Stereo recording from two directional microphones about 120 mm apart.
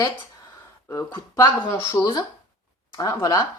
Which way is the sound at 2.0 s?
10° left (ahead or behind).